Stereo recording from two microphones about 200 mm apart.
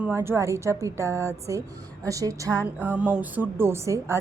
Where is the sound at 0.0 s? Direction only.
10° right (ahead or behind).